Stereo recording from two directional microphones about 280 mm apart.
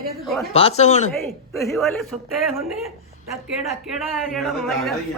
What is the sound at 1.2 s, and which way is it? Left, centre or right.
A woman's voice, centre.